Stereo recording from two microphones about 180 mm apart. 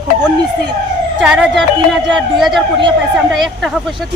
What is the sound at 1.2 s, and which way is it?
Speech, 5° right (ahead or behind).